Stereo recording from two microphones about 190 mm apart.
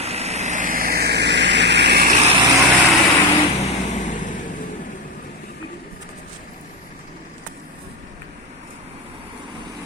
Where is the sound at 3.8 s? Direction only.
40° left (ahead or behind).